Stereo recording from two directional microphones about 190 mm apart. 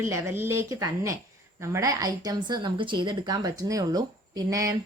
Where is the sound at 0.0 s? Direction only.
15° right (ahead or behind).